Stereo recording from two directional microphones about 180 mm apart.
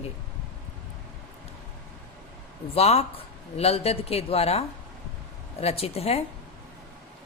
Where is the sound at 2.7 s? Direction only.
35° left (ahead or behind).